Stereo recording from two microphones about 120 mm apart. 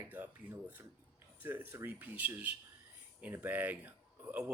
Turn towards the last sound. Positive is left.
turn(degrees=-10)  # may be behind; listen again after turning